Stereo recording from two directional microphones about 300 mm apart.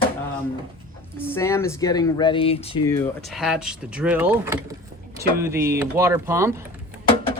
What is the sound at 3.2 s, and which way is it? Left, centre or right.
Speech, centre.